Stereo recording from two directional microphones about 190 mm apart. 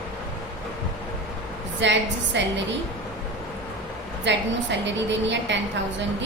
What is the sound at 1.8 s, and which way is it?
Speech, 70° right (ahead or behind).